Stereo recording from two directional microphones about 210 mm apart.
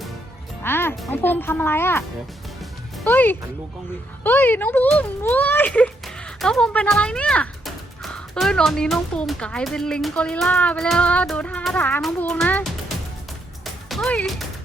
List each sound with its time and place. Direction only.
0.6 s music: 10° left (ahead or behind)
1.0 s speech: 10° left (ahead or behind)
13.9 s speech: 5° left (ahead or behind)